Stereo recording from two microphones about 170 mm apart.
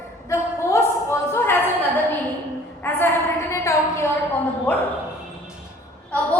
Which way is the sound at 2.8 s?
10° left (ahead or behind).